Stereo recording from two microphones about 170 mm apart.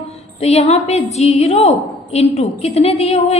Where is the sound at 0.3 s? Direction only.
40° left (ahead or behind).